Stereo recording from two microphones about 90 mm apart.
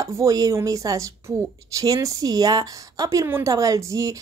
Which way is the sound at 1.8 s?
40° right (ahead or behind).